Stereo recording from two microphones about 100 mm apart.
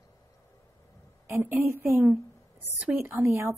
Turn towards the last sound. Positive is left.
turn(degrees=-25)  # may be behind; listen again after turning